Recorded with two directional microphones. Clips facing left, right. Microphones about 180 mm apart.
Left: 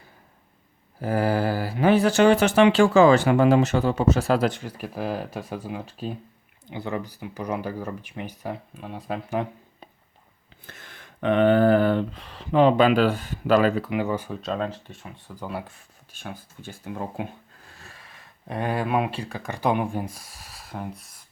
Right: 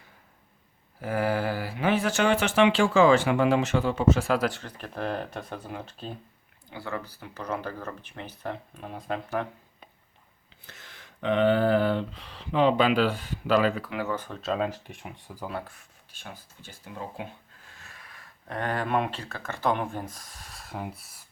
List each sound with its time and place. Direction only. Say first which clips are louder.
0.9 s speech: left 4 dB; 35° left (ahead or behind)
4.6 s speech: left 3 dB; 5° left (ahead or behind)
10.7 s speech: left 4 dB; 55° left (ahead or behind)
13.9 s speech: left 5 dB; 15° left (ahead or behind)
14.4 s speech: even; 5° right (ahead or behind)
16.3 s speech: left 7 dB; 50° left (ahead or behind)
17.7 s snort: left 2 dB; 30° left (ahead or behind)
18.4 s speech: left 3 dB; 10° left (ahead or behind); by 21.2 s 5° right (ahead or behind)